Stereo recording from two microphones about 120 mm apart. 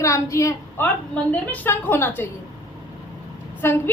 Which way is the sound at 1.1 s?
15° left (ahead or behind).